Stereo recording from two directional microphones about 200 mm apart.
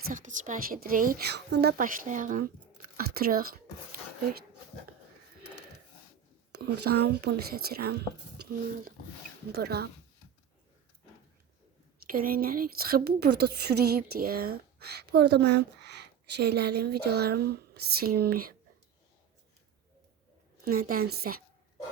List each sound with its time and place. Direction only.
0.1 s a woman's voice: 40° right (ahead or behind); by 1.7 s 55° right (ahead or behind)
1.8 s speech: 40° right (ahead or behind)
3.0 s a sound: 50° right (ahead or behind)
6.5 s a woman's voice: 55° right (ahead or behind)
9.5 s a woman's voice: 55° right (ahead or behind)
12.0 s a woman's voice: 45° right (ahead or behind)
20.7 s a woman's voice: 45° right (ahead or behind)